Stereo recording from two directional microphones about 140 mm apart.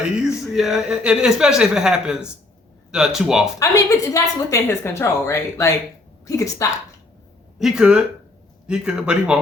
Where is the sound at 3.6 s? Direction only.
25° left (ahead or behind).